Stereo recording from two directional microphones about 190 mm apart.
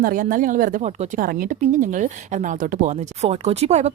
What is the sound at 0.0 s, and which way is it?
Speech, 45° right (ahead or behind).